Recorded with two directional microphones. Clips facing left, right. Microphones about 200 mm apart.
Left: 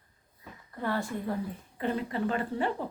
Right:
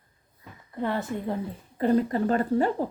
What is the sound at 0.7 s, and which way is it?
Speech, 20° right (ahead or behind).